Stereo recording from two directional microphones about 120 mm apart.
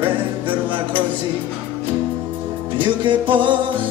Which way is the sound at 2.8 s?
45° right (ahead or behind).